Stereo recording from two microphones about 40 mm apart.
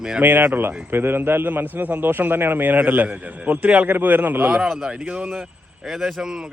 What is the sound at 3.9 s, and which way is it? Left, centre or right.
Speech, right.